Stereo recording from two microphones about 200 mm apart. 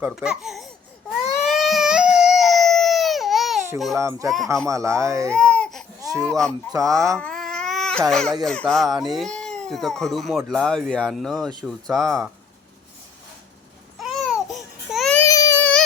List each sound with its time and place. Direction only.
0.0 s speech: 5° right (ahead or behind)
1.5 s baby cry: centre (ahead or behind)
3.9 s speech: 15° right (ahead or behind)
5.3 s baby cry: 5° left (ahead or behind)
6.0 s a sound: 15° right (ahead or behind)
6.2 s speech: 5° left (ahead or behind)
6.7 s speech: 15° right (ahead or behind)
7.2 s baby cry: 5° left (ahead or behind)
8.4 s speech: centre (ahead or behind)
14.0 s babbling: centre (ahead or behind)